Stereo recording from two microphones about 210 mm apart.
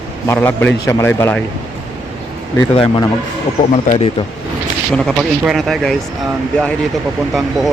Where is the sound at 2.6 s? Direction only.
25° left (ahead or behind).